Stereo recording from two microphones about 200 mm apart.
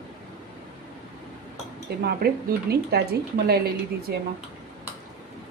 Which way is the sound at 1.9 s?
50° right (ahead or behind).